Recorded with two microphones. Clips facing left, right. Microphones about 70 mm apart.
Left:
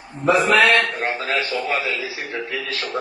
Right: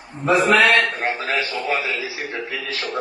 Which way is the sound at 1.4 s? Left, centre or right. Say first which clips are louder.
Left 1 dB; centre.